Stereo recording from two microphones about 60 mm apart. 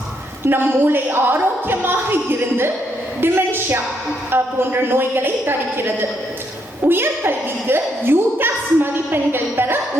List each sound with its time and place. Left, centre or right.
0.4 s a woman's voice: right
3.2 s a woman's voice: right